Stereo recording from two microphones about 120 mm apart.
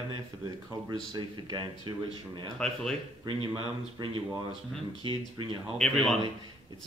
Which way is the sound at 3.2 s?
50° right (ahead or behind).